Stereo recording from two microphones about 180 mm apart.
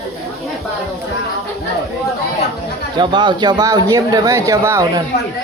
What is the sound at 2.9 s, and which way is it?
Speech, 25° right (ahead or behind).